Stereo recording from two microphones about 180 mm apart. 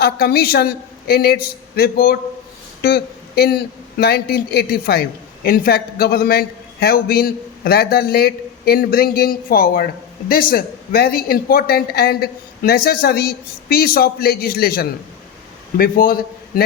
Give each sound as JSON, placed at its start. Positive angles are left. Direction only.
{"t": 0.0, "sound": "speech", "side_deg": 60}